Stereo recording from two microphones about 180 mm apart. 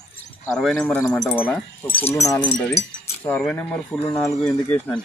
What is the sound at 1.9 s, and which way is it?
Speech, 35° left (ahead or behind).